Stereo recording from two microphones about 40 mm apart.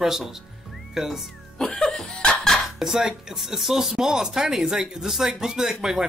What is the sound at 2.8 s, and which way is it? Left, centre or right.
Speech, centre.